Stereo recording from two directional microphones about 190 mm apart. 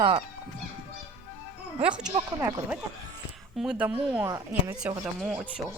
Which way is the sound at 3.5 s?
5° right (ahead or behind).